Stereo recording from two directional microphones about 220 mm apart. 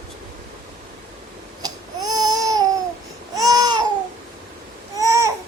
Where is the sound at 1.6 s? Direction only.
15° right (ahead or behind).